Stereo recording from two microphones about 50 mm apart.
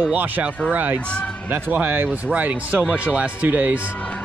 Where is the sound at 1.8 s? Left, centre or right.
Right.